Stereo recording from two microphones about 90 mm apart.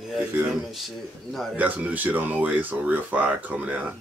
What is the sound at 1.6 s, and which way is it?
Speech, 15° right (ahead or behind).